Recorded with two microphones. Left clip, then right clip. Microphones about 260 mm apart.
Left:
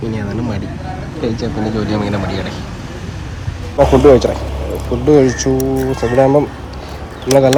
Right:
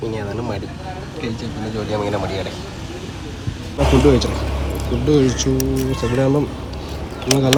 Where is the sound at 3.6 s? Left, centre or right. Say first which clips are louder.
Left 7 dB; centre.